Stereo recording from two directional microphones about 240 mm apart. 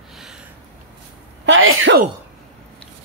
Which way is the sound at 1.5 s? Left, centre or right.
Right.